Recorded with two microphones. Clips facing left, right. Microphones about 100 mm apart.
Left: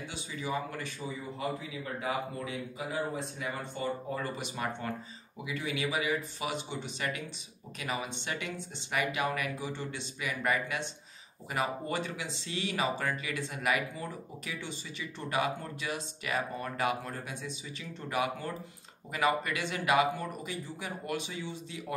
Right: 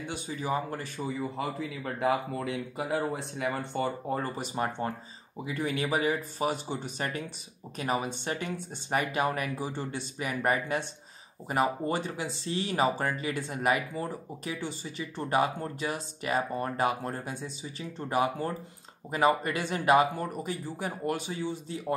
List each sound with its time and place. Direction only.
0.1 s speech: 40° right (ahead or behind)
1.6 s a man's voice: 65° right (ahead or behind)
4.1 s speech: 35° right (ahead or behind)